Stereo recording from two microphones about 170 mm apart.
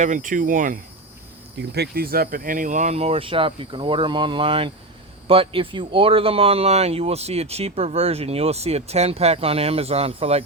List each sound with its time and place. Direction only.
0.0 s speech: 50° right (ahead or behind)
1.5 s speech: 75° right (ahead or behind); by 10.4 s 35° right (ahead or behind)